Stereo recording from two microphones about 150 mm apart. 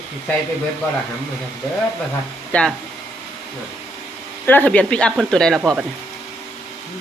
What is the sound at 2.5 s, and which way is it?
Speech, 10° left (ahead or behind).